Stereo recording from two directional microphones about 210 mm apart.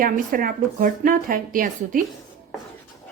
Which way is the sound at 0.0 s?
40° right (ahead or behind).